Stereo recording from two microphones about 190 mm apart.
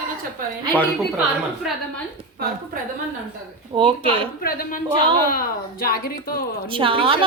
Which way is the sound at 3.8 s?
25° right (ahead or behind).